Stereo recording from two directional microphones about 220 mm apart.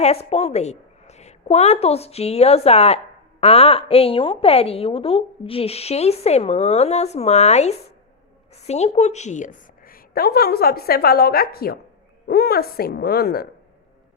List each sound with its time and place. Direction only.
0.0 s a woman's voice: 30° left (ahead or behind); by 13.5 s 45° left (ahead or behind)